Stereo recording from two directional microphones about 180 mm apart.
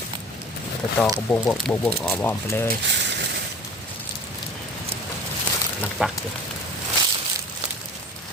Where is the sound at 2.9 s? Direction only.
75° right (ahead or behind).